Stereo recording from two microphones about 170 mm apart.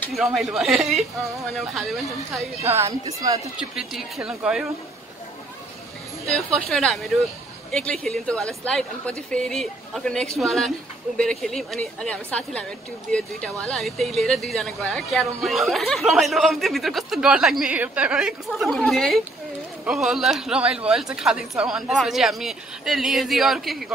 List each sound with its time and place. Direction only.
0.1 s speech: centre (ahead or behind)
2.7 s a woman's voice: 15° right (ahead or behind)
3.5 s speech: 5° right (ahead or behind)
6.3 s speech: 5° left (ahead or behind)